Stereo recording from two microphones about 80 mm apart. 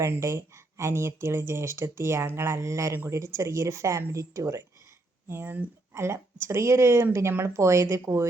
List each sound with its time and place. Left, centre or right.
0.0 s speech: right
5.3 s speech: right